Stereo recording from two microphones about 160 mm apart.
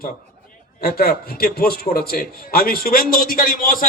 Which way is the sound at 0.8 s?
70° left (ahead or behind).